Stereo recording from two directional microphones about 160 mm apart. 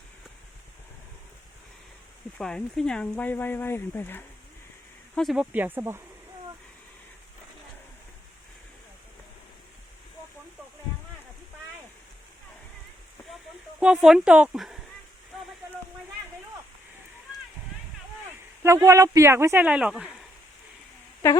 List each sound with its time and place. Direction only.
2.4 s speech: 5° left (ahead or behind)
5.1 s speech: centre (ahead or behind)
5.5 s speech: 10° right (ahead or behind)
13.7 s speech: 5° right (ahead or behind)
18.6 s speech: 20° right (ahead or behind)